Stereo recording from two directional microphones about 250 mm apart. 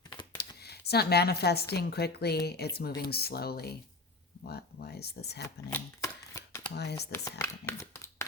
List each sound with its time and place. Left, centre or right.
0.3 s a sound: left
1.7 s speech: left
5.7 s shuffling cards: centre
6.7 s speech: left
7.3 s speech: centre